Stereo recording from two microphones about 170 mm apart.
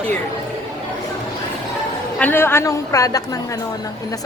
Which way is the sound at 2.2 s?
10° left (ahead or behind).